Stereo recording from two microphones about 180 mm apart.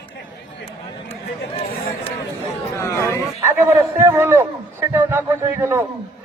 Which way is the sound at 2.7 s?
15° left (ahead or behind).